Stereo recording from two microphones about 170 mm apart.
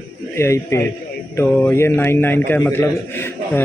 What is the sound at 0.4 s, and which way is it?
A man's voice, 15° left (ahead or behind).